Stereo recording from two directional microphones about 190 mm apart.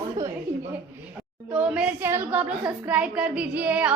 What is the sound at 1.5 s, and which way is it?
A woman's voice, 5° right (ahead or behind).